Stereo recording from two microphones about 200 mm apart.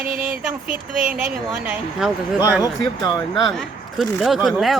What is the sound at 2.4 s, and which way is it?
Speech, 20° left (ahead or behind).